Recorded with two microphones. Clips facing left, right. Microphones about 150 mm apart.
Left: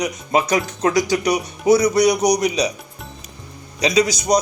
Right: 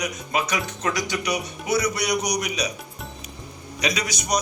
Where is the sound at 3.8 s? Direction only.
30° left (ahead or behind).